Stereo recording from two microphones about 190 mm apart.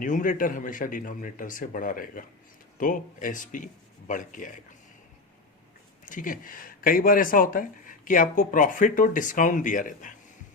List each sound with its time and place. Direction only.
0.0 s speech: 45° left (ahead or behind)
6.1 s speech: 45° left (ahead or behind)